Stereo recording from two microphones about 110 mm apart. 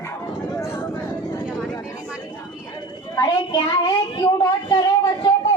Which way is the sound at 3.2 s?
40° left (ahead or behind).